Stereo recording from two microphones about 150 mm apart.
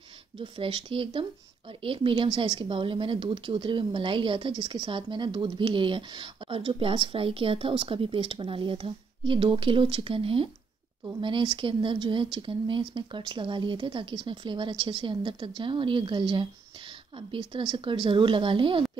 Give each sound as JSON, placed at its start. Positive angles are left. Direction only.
{"t": 0.4, "sound": "speech", "side_deg": -35}